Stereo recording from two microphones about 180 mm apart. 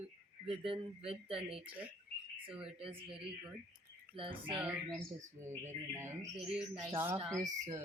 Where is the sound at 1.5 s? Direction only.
5° right (ahead or behind).